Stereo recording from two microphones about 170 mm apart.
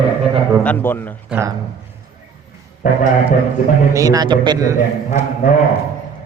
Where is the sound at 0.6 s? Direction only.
10° left (ahead or behind).